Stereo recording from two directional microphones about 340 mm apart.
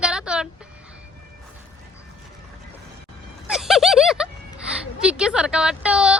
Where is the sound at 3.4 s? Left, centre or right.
Centre.